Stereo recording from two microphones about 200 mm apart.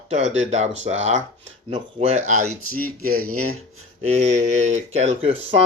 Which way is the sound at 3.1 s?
90° right.